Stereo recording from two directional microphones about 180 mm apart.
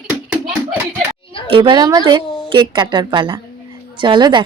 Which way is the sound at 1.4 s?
25° right (ahead or behind).